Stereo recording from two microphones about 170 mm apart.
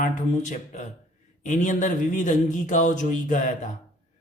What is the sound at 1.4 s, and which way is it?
Speech, 45° left (ahead or behind).